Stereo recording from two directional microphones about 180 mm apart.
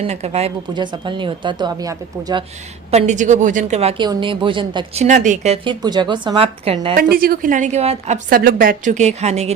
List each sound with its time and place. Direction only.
0.1 s speech: 35° right (ahead or behind)
0.7 s speech: 25° right (ahead or behind)
2.9 s speech: 40° right (ahead or behind); by 5.0 s 25° right (ahead or behind)
5.0 s speech: 45° right (ahead or behind)
5.8 s speech: 25° right (ahead or behind)
6.9 s a woman's voice: 55° right (ahead or behind); by 8.2 s 35° right (ahead or behind)
8.3 s a woman's voice: 55° right (ahead or behind); by 9.5 s 35° right (ahead or behind)